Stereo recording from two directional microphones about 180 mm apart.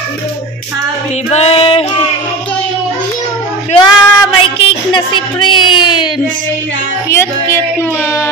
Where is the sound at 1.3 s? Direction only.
35° left (ahead or behind).